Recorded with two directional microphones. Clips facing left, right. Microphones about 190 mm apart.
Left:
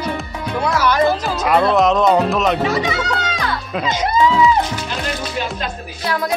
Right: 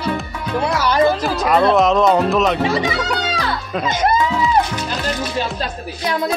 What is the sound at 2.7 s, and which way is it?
Speech, 30° right (ahead or behind).